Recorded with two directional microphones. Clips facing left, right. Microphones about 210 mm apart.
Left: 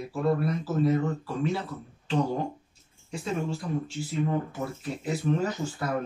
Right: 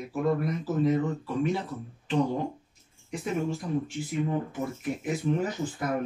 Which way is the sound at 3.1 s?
15° right (ahead or behind).